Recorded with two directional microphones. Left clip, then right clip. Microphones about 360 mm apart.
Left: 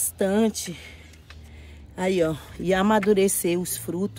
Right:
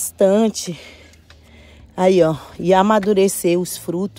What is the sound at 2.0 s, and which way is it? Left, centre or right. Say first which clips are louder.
Speech: right 9 dB; centre.